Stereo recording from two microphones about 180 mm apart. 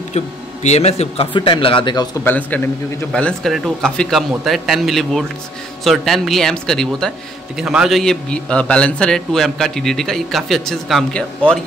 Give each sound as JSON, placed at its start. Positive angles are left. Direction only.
{"t": 0.1, "sound": "speech", "side_deg": 35}
{"t": 2.2, "sound": "a man's voice", "side_deg": 10}